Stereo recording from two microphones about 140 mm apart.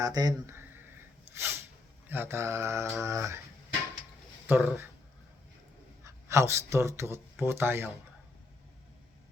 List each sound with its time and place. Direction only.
0.0 s mantra: 25° right (ahead or behind)
1.3 s a sound: 20° right (ahead or behind)
2.0 s mantra: 15° right (ahead or behind)
4.4 s speech: 15° right (ahead or behind)
6.1 s speech: 20° right (ahead or behind)